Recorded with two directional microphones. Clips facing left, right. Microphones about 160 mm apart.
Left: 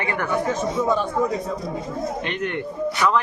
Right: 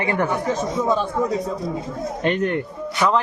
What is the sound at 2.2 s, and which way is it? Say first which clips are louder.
Speech: right 6 dB; 40° right (ahead or behind).